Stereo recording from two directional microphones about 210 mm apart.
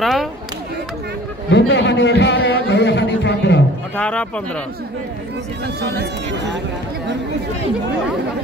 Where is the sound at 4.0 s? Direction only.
5° left (ahead or behind).